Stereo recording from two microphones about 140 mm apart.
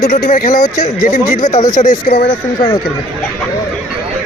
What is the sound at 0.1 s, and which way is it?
Speech, 70° left (ahead or behind).